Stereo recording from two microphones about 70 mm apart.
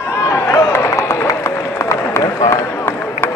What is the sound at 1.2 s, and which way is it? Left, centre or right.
Run, left.